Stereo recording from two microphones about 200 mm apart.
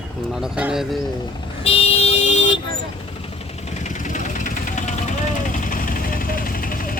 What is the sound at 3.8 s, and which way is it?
Vehicle, 40° left (ahead or behind).